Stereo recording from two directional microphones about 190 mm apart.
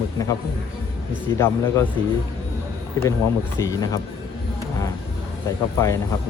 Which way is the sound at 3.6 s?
20° left (ahead or behind).